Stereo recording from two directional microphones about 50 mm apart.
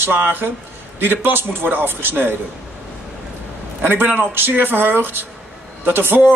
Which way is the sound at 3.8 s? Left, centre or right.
Right.